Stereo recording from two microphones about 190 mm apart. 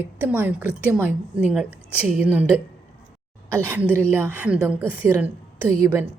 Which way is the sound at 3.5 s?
10° right (ahead or behind).